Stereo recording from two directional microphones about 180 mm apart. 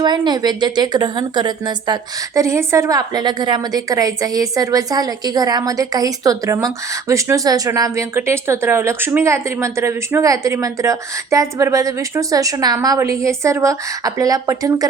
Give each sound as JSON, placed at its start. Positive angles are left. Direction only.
{"t": 0.0, "sound": "a woman's voice", "side_deg": -25}